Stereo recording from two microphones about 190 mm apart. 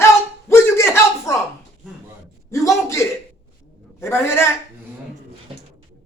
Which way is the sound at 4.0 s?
15° left (ahead or behind).